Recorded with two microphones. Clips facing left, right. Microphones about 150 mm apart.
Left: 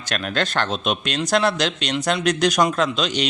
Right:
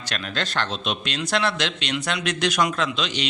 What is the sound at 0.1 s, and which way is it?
A man's voice, 50° left (ahead or behind).